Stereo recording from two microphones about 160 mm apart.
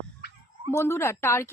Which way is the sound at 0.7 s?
15° left (ahead or behind).